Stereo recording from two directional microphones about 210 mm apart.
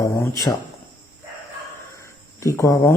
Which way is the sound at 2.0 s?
15° left (ahead or behind).